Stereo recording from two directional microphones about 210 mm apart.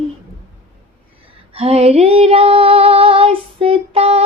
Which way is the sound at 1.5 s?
30° right (ahead or behind).